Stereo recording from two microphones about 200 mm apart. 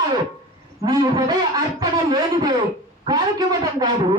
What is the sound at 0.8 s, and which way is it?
A woman's voice, 20° right (ahead or behind).